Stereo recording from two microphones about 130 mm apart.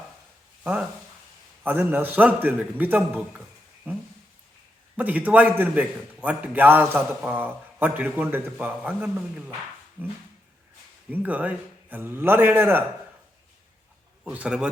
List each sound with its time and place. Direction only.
0.6 s a man's voice: 10° right (ahead or behind)
11.1 s a man's voice: 10° right (ahead or behind)
14.3 s a man's voice: 10° right (ahead or behind)